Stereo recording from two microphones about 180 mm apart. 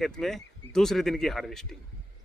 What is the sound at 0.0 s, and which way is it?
A man's voice, centre (ahead or behind).